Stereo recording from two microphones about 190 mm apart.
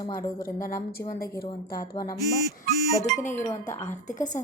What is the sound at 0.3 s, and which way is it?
Speech, 50° left (ahead or behind).